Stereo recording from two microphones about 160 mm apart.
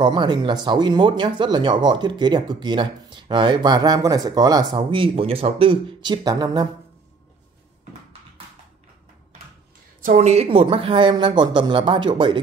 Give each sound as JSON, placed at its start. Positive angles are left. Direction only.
{"t": 0.0, "sound": "speech", "side_deg": -30}
{"t": 10.0, "sound": "speech", "side_deg": -45}